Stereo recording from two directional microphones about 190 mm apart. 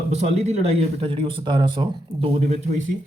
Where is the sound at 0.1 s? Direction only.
35° right (ahead or behind).